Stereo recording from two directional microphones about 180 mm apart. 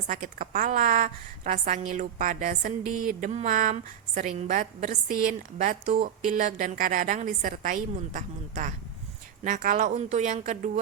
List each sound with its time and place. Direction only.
0.1 s a woman's voice: 45° right (ahead or behind)